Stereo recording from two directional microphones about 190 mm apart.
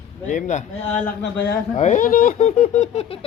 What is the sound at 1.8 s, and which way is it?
Speech, 40° left (ahead or behind).